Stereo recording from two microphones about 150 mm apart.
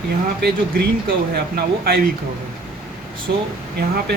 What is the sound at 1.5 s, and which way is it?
Speech, 90° right.